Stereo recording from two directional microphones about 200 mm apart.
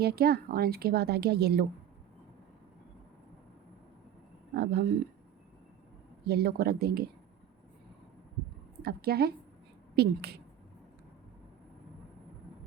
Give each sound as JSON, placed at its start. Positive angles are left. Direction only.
{"t": 0.0, "sound": "a woman's voice", "side_deg": -50}
{"t": 4.5, "sound": "a woman's voice", "side_deg": -55}
{"t": 6.2, "sound": "a woman's voice", "side_deg": -50}
{"t": 8.8, "sound": "a woman's voice", "side_deg": -50}